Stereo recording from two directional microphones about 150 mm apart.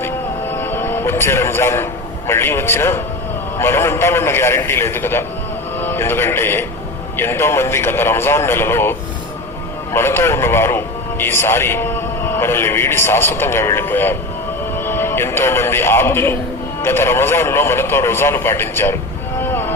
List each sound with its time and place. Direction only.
0.0 s music: 15° left (ahead or behind)
3.6 s a man's voice: 15° left (ahead or behind)
19.4 s music: 15° left (ahead or behind)